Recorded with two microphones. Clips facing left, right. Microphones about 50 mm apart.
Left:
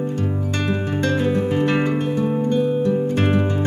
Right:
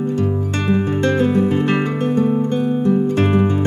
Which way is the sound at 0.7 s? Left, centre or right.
Right.